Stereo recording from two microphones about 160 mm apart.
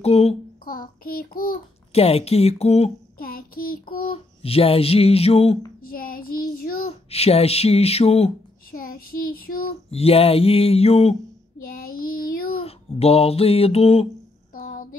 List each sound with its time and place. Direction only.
0.0 s child singing: 40° left (ahead or behind)
0.7 s child singing: 65° left (ahead or behind)
1.9 s child singing: 40° left (ahead or behind)
3.2 s child singing: 65° left (ahead or behind)
3.8 s child singing: 30° left (ahead or behind)
5.9 s child singing: 65° left (ahead or behind)
6.9 s child singing: 40° left (ahead or behind)
8.7 s child singing: 65° left (ahead or behind)
9.8 s child singing: 40° left (ahead or behind)
11.6 s child singing: 65° left (ahead or behind)
12.5 s a sound: 40° left (ahead or behind)
14.5 s a sound: 60° left (ahead or behind)